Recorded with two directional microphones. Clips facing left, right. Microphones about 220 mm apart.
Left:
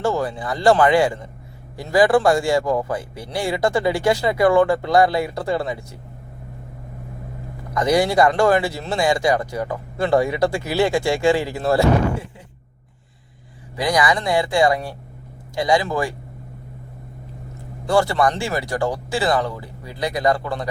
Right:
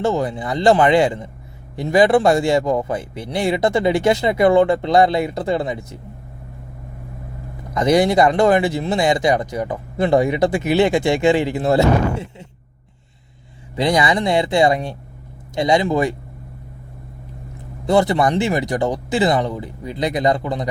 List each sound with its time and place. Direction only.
0.0 s speech: 20° right (ahead or behind)
7.7 s speech: 20° right (ahead or behind)
13.7 s speech: 25° right (ahead or behind)
17.8 s speech: 20° right (ahead or behind)